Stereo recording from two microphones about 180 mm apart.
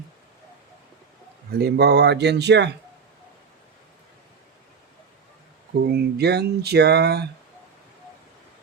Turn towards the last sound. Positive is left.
turn(degrees=-65)  # may be behind; listen again after turning